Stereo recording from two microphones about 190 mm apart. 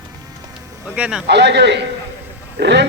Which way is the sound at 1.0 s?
5° right (ahead or behind).